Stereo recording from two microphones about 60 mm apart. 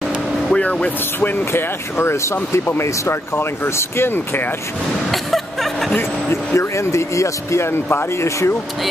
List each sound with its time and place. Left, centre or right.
0.5 s speech: centre; by 4.5 s left
5.1 s chuckle: centre
5.9 s speech: left